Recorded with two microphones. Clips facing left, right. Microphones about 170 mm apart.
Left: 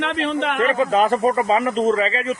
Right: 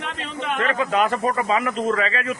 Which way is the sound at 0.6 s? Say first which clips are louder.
Left 3 dB; 30° left (ahead or behind).